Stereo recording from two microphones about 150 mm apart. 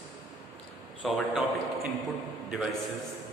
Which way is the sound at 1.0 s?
Centre (ahead or behind).